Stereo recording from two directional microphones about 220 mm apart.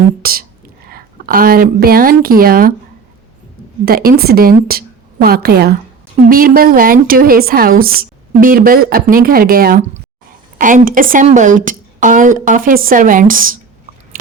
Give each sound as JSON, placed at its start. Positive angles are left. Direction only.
{"t": 0.2, "sound": "a woman's voice", "side_deg": -40}
{"t": 3.8, "sound": "a woman's voice", "side_deg": -45}